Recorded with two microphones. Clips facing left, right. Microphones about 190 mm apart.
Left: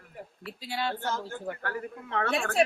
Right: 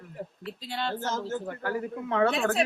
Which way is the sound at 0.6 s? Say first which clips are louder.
Even; 5° left (ahead or behind).